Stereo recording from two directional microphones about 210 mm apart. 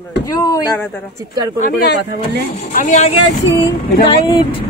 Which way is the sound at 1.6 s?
50° left (ahead or behind).